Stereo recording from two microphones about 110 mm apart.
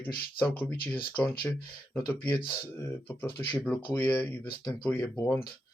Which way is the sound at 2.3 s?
45° left (ahead or behind).